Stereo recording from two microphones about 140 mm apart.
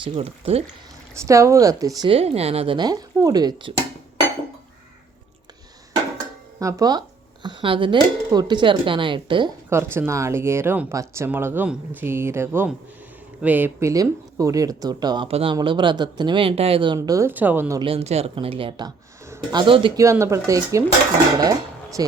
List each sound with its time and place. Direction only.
0.0 s speech: 40° right (ahead or behind)
1.1 s speech: 20° right (ahead or behind)
2.0 s speech: 45° right (ahead or behind)
2.7 s speech: 30° right (ahead or behind)
6.6 s speech: 25° right (ahead or behind)
9.6 s speech: 15° right (ahead or behind)
15.3 s speech: 45° right (ahead or behind)
17.2 s speech: 15° right (ahead or behind)
17.8 s speech: 45° right (ahead or behind)
19.2 s a sound: 20° right (ahead or behind)
19.5 s speech: 35° right (ahead or behind)
20.0 s speech: 20° right (ahead or behind)